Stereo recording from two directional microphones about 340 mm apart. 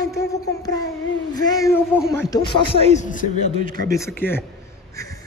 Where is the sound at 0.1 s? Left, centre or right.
Centre.